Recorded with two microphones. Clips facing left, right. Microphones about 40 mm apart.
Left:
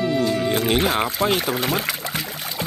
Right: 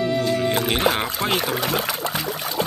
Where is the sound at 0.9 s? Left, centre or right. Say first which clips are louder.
Left 3 dB; centre.